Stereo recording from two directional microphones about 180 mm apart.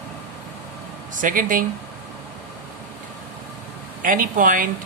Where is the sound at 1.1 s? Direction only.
50° right (ahead or behind).